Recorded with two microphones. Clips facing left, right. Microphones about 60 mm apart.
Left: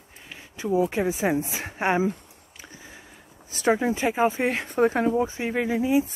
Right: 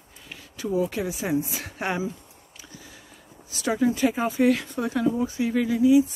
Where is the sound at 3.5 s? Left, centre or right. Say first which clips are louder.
Left 1 dB; left.